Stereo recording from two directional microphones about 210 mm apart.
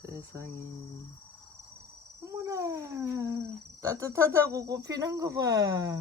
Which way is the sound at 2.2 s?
15° right (ahead or behind).